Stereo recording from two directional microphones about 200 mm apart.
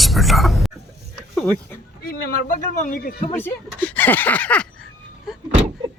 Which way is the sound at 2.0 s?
45° left (ahead or behind).